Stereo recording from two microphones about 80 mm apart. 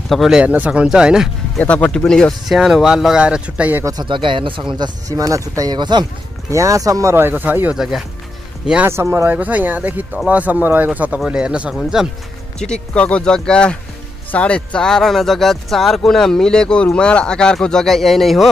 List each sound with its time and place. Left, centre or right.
0.1 s speech: centre
0.4 s speech: centre
1.6 s speech: centre
2.4 s speech: centre
4.0 s speech: right
4.7 s speech: right
5.1 s speech: right
5.6 s speech: right
6.5 s speech: right
7.2 s speech: right
7.7 s speech: centre
8.8 s speech: right; by 12.1 s centre
12.5 s speech: centre